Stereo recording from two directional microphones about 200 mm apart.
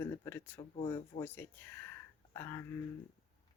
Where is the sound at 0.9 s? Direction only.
10° left (ahead or behind).